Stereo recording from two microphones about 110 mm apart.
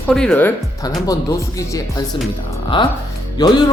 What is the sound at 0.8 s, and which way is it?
Speech, 35° left (ahead or behind).